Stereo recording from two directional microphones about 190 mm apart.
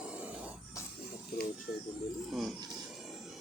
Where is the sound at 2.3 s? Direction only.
Centre (ahead or behind).